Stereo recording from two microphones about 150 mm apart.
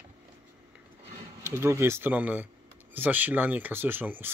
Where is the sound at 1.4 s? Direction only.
15° right (ahead or behind).